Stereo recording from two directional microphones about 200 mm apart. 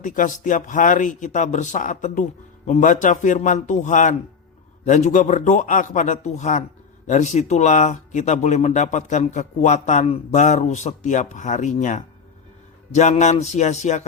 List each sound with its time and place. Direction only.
0.0 s speech: 40° left (ahead or behind)